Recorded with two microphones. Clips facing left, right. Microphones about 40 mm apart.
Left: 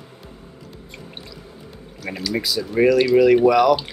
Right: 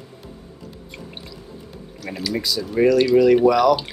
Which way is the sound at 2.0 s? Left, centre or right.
Centre.